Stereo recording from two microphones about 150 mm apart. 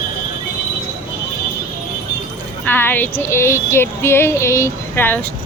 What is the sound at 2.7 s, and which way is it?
Speech, 15° left (ahead or behind).